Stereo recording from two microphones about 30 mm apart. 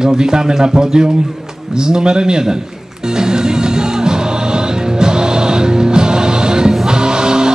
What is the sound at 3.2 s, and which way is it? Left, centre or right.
Music, right.